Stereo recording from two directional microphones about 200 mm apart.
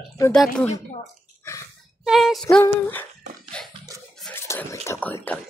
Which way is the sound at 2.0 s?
Centre (ahead or behind).